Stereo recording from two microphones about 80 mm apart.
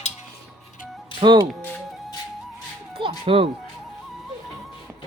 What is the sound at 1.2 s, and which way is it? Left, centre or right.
Speech, right.